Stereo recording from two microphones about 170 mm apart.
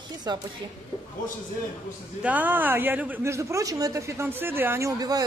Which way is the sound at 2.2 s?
10° right (ahead or behind).